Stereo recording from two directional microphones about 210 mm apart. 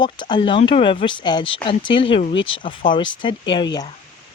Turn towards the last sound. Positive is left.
turn(degrees=20)  # may be behind; listen again after turning